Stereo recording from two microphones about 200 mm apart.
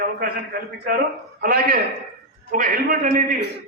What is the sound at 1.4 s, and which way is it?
A man's voice, 45° right (ahead or behind).